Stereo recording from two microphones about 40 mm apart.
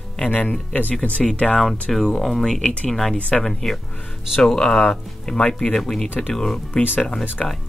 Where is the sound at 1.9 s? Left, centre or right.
Centre.